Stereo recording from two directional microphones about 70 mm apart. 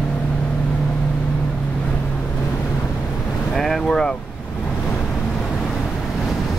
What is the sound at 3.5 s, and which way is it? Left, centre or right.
Speech, centre.